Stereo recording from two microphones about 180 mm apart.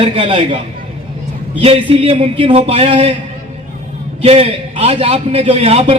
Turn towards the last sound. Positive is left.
turn(degrees=-35)  # may be behind; listen again after turning